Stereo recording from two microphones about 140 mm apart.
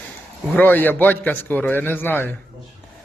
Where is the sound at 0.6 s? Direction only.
15° left (ahead or behind).